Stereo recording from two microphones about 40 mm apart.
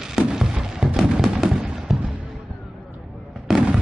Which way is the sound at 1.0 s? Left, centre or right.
Centre.